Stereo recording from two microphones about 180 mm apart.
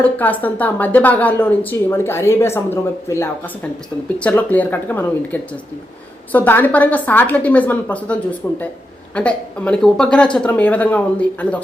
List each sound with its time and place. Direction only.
0.0 s speech: 10° left (ahead or behind)